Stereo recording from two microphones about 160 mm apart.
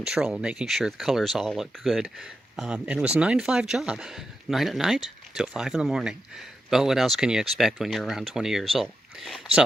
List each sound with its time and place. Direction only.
0.0 s speech: 5° right (ahead or behind)